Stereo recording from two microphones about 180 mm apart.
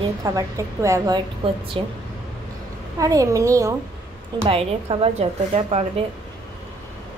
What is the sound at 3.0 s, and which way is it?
Speech, 20° right (ahead or behind).